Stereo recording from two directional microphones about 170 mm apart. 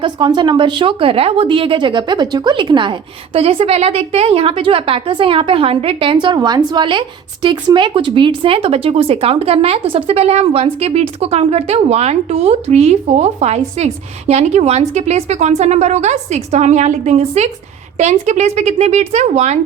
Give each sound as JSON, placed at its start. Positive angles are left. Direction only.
{"t": 0.0, "sound": "a woman's voice", "side_deg": -25}